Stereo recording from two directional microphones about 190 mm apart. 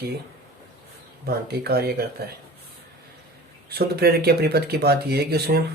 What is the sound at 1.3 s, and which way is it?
Speech, 55° right (ahead or behind).